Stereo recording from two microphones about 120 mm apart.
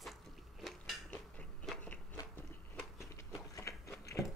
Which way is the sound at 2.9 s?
25° left (ahead or behind).